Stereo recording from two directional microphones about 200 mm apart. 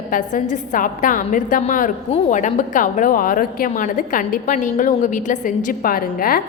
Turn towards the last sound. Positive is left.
turn(degrees=45)  # may be behind; listen again after turning